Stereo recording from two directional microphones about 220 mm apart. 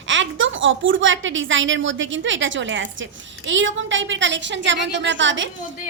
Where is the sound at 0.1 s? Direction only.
60° right (ahead or behind).